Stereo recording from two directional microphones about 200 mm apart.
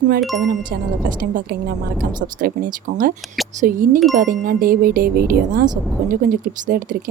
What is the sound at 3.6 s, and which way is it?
Speech, 45° right (ahead or behind).